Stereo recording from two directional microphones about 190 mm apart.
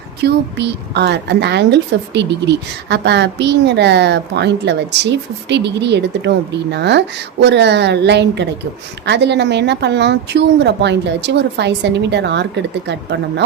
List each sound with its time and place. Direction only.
0.2 s a woman's voice: 65° right (ahead or behind)